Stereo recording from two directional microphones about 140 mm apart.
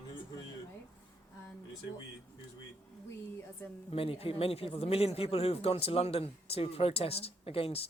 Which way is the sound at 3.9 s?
40° left (ahead or behind).